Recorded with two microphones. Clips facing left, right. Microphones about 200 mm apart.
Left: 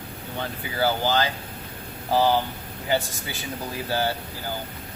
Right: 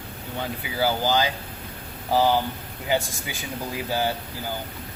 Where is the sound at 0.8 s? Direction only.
15° right (ahead or behind).